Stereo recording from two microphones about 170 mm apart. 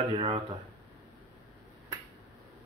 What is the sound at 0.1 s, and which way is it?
Speech, 30° right (ahead or behind).